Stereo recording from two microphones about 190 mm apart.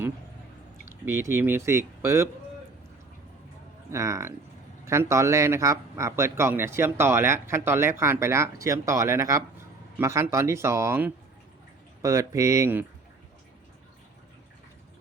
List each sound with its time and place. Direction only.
1.0 s a man's voice: 15° right (ahead or behind)
3.9 s a man's voice: 15° right (ahead or behind)